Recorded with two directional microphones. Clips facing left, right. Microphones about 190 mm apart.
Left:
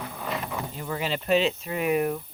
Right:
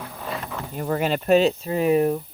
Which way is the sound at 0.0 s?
Centre (ahead or behind).